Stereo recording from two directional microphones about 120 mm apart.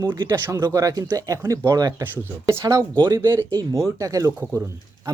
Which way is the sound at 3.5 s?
30° right (ahead or behind).